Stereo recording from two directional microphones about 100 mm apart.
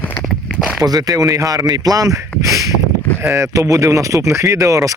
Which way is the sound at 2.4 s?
35° right (ahead or behind).